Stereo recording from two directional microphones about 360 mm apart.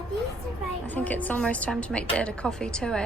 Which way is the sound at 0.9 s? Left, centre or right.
Centre.